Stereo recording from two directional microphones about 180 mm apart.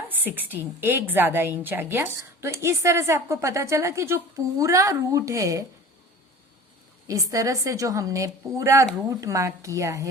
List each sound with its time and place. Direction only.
0.1 s a woman's voice: 10° right (ahead or behind)
7.1 s a woman's voice: 20° right (ahead or behind)